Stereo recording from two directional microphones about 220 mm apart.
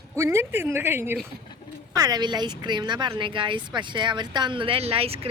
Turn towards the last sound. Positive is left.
turn(degrees=-25)  # may be behind; listen again after turning